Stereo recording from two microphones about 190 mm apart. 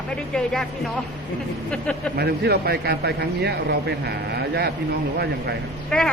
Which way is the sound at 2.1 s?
55° right (ahead or behind).